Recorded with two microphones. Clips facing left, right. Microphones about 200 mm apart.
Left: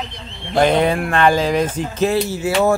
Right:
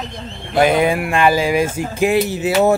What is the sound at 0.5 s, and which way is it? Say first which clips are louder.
Speech: right 1 dB; 5° right (ahead or behind).